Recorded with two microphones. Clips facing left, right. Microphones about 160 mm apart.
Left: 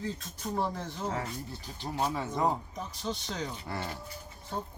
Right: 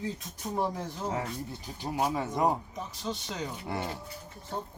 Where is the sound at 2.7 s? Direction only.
Centre (ahead or behind).